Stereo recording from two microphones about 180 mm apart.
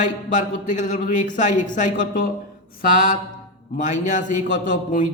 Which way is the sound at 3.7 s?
40° left (ahead or behind).